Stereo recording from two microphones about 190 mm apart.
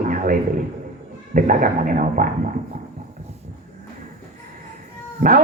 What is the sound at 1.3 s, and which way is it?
A man's voice, 45° right (ahead or behind).